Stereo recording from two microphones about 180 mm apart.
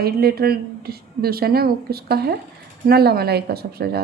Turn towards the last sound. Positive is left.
turn(degrees=-60)  # may be behind; listen again after turning